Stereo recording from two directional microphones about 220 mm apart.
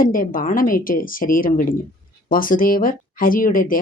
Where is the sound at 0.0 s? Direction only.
40° left (ahead or behind).